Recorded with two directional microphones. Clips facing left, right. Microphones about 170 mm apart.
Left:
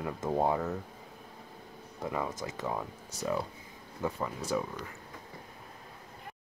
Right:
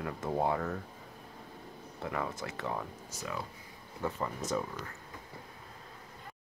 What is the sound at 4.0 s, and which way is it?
Speech, 10° left (ahead or behind).